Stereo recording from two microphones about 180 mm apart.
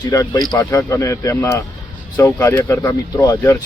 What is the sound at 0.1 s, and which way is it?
Speech, 15° left (ahead or behind).